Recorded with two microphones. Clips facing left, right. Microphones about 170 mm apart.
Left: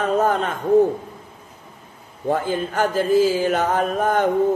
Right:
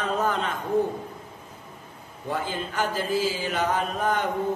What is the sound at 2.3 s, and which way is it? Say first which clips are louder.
Speech: left 8 dB; 50° left (ahead or behind).